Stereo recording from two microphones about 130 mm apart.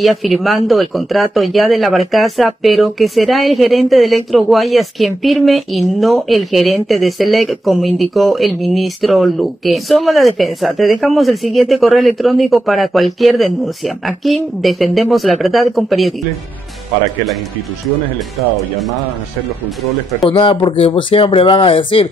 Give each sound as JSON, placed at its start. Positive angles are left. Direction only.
{"t": 0.0, "sound": "speech", "side_deg": 0}
{"t": 20.2, "sound": "speech", "side_deg": 40}